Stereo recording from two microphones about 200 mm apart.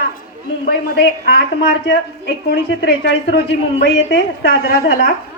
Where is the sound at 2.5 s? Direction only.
55° left (ahead or behind).